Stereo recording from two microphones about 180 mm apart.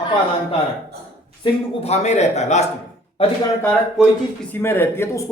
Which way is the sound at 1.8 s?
35° left (ahead or behind).